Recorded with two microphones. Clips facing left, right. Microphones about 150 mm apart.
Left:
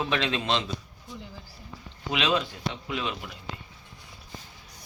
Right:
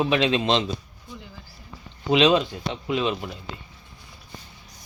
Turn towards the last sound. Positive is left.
turn(degrees=-25)  # may be behind; listen again after turning